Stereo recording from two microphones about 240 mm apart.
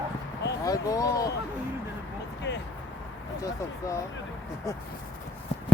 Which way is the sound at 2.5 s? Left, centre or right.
Left.